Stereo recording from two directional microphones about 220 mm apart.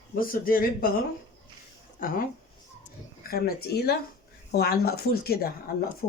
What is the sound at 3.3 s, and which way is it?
Speech, 45° left (ahead or behind).